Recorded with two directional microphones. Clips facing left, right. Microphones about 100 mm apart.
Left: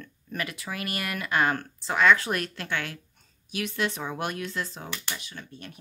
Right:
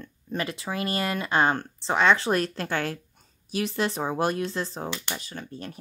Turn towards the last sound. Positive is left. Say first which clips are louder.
# right 5 dB
turn(degrees=-35)  # may be behind; listen again after turning